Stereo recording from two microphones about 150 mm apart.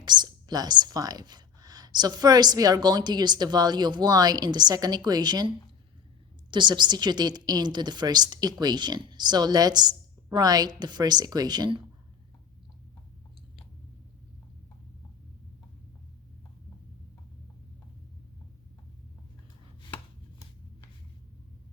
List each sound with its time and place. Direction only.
0.0 s speech: 30° right (ahead or behind)